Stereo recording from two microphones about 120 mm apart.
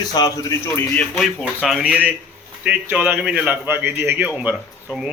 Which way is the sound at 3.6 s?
20° right (ahead or behind).